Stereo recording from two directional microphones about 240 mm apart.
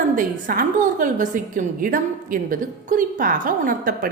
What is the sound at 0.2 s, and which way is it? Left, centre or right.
A woman's voice, right.